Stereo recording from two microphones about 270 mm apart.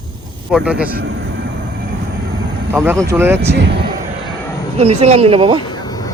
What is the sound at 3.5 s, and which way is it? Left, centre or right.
Speech, right.